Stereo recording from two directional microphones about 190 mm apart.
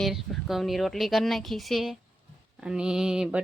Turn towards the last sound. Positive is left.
turn(degrees=-5)  # may be behind; listen again after turning